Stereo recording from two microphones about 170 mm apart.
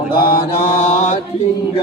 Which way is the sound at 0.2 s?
60° left (ahead or behind).